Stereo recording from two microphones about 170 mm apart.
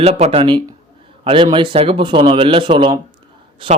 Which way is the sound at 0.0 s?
40° right (ahead or behind).